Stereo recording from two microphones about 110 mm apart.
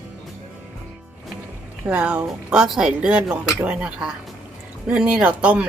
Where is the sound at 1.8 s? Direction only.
10° right (ahead or behind).